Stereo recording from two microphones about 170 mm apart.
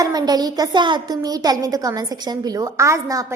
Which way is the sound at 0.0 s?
20° right (ahead or behind).